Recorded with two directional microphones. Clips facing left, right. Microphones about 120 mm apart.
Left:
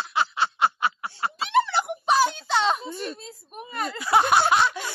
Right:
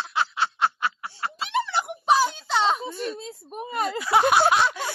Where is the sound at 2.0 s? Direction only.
Centre (ahead or behind).